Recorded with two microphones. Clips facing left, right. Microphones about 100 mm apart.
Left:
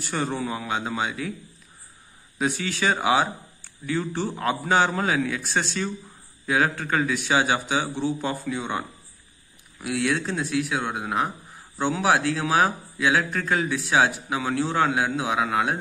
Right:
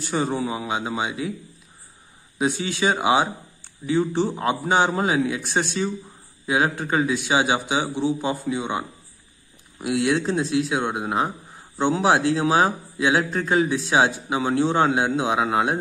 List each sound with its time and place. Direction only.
0.0 s a man's voice: 20° right (ahead or behind)
2.3 s a man's voice: 20° right (ahead or behind)